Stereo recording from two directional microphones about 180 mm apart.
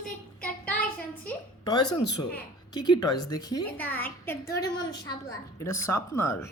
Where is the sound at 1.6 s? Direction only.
20° left (ahead or behind).